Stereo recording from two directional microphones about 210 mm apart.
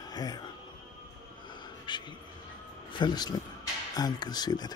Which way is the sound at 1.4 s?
20° left (ahead or behind).